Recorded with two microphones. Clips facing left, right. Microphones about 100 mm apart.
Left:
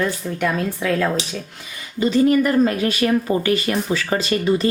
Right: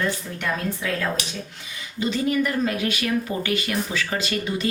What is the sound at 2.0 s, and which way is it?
Speech, 40° left (ahead or behind).